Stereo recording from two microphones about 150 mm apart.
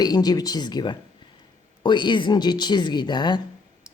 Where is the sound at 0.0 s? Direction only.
25° left (ahead or behind).